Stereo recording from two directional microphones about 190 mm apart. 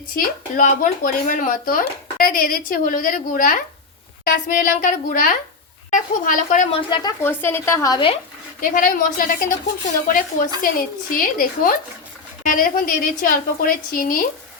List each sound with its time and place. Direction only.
0.2 s speech: 45° left (ahead or behind)
6.7 s speech: 25° left (ahead or behind)
7.2 s a woman's voice: 10° left (ahead or behind)
8.6 s speech: 45° left (ahead or behind)